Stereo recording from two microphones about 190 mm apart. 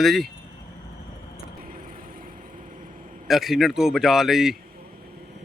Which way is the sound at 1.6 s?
45° right (ahead or behind).